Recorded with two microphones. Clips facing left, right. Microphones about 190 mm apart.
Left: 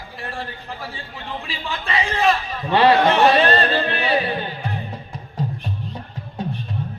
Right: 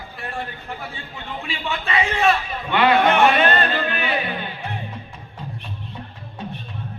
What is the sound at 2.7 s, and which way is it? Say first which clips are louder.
Music: left 2 dB; 35° left (ahead or behind).